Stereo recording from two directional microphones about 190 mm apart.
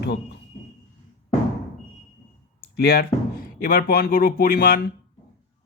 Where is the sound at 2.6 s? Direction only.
60° left (ahead or behind).